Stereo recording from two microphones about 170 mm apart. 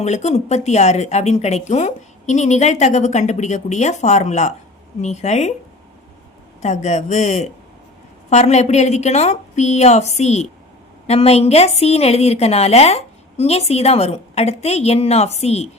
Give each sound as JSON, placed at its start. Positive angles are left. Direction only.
{"t": 0.0, "sound": "a woman's voice", "side_deg": 40}
{"t": 6.6, "sound": "a woman's voice", "side_deg": 40}